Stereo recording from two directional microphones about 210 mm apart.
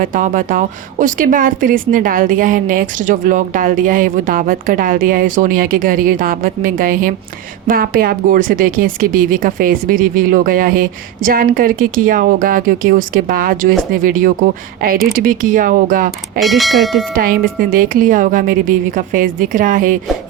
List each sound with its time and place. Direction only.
0.0 s speech: 40° right (ahead or behind)
16.4 s speech: centre (ahead or behind)
17.2 s speech: 40° right (ahead or behind)